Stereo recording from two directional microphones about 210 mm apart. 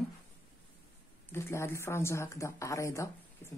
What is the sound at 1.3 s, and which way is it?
Speech, 10° left (ahead or behind).